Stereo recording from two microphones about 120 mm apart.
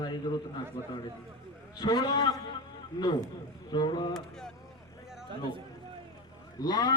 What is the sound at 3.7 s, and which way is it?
Speech, 40° left (ahead or behind).